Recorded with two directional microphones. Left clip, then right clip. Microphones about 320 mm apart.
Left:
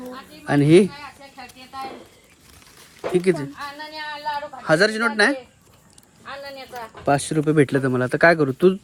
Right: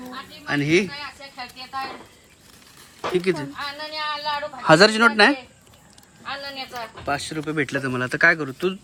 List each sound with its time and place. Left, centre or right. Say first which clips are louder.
0.4 s speech: left 5 dB; centre
3.2 s speech: left 3 dB; centre
7.1 s speech: left 7 dB; centre